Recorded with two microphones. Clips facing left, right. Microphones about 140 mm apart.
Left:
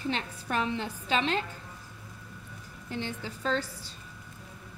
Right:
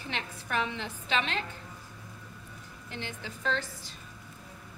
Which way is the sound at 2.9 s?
35° left (ahead or behind).